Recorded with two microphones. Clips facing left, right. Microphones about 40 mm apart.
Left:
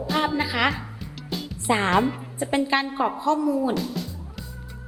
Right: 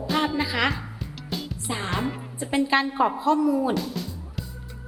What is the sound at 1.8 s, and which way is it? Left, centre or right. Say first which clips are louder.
A woman's voice: left 7 dB; centre.